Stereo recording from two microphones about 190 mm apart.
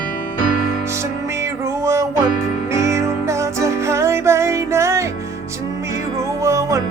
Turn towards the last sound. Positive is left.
turn(degrees=-15)  # may be behind; listen again after turning